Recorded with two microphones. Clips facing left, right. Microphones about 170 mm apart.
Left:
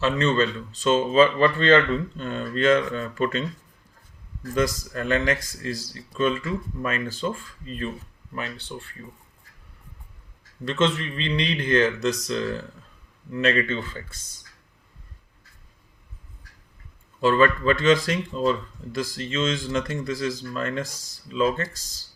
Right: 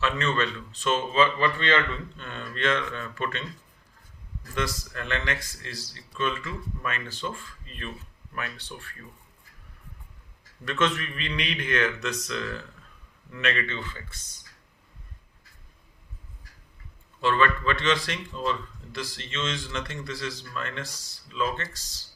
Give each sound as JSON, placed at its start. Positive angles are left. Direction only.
{"t": 0.0, "sound": "speech", "side_deg": 30}
{"t": 4.5, "sound": "speech", "side_deg": 45}
{"t": 8.3, "sound": "speech", "side_deg": 25}
{"t": 10.7, "sound": "speech", "side_deg": 25}
{"t": 17.2, "sound": "speech", "side_deg": 40}